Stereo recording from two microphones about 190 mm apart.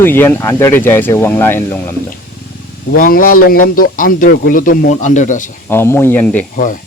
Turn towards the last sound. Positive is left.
turn(degrees=10)  # may be behind; listen again after turning